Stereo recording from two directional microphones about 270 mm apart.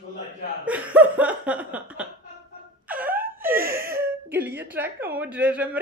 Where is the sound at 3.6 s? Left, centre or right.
Right.